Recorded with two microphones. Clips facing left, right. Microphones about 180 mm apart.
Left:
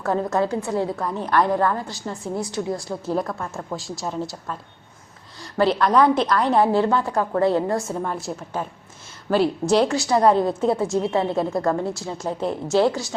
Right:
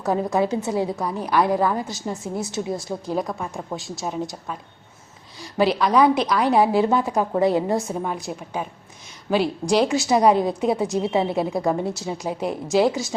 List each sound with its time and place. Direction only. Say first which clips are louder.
0.0 s a woman's voice: right 1 dB; 15° right (ahead or behind)
9.9 s a woman's voice: even; 20° right (ahead or behind)